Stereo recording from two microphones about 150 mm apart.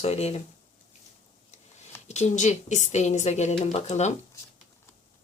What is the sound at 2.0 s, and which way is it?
Speech, 50° left (ahead or behind).